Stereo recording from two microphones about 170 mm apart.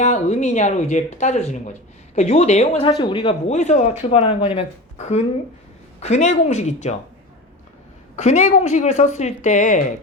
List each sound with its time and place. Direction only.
0.0 s a woman's voice: 45° left (ahead or behind)
3.0 s a man's voice: 30° left (ahead or behind)
3.5 s a woman's voice: 45° left (ahead or behind)
8.1 s a woman's voice: 45° left (ahead or behind)